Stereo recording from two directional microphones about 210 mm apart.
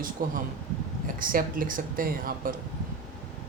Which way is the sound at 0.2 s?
40° right (ahead or behind).